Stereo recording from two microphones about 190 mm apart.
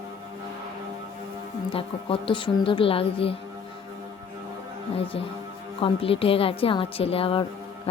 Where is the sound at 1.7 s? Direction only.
30° left (ahead or behind).